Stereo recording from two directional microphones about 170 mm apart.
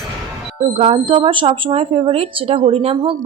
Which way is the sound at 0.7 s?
35° right (ahead or behind).